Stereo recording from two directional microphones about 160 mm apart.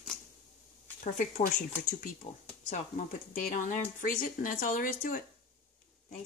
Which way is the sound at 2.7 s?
60° left (ahead or behind).